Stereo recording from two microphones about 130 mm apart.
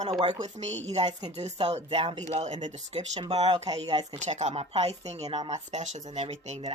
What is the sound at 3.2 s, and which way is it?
Speech, 55° right (ahead or behind).